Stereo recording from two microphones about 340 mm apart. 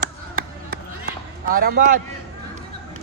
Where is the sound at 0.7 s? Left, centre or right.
Right.